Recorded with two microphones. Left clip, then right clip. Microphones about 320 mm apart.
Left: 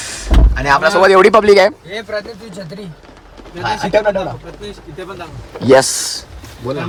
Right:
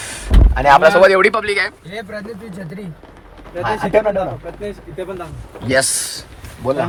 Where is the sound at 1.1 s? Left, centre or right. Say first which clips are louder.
Left 6 dB; centre.